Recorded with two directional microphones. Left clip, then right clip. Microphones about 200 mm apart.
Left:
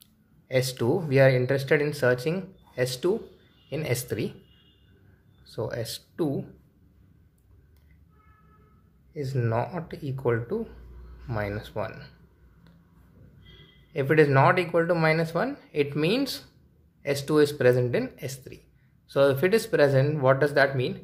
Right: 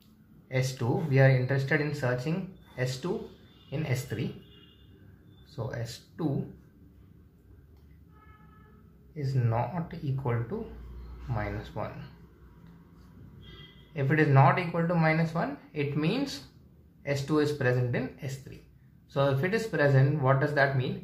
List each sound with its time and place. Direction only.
0.5 s speech: 50° left (ahead or behind)
5.5 s speech: 50° left (ahead or behind)
9.1 s speech: 55° left (ahead or behind)
13.9 s speech: 55° left (ahead or behind)